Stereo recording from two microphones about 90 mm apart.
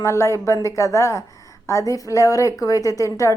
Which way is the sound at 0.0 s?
35° left (ahead or behind).